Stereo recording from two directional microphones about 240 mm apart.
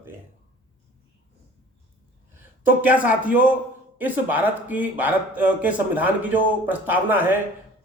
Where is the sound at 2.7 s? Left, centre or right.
Centre.